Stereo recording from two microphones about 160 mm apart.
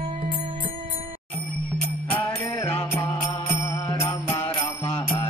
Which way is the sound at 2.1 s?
10° left (ahead or behind).